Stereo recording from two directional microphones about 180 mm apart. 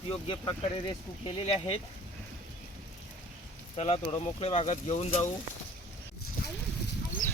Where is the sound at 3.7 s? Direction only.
35° left (ahead or behind).